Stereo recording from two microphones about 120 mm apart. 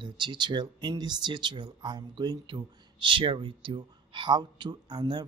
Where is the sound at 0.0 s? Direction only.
40° right (ahead or behind).